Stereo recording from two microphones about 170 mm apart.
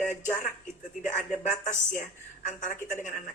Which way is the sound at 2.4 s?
45° left (ahead or behind).